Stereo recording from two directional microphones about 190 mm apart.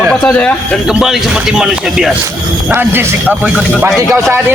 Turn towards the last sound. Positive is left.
turn(degrees=-5)  # may be behind; listen again after turning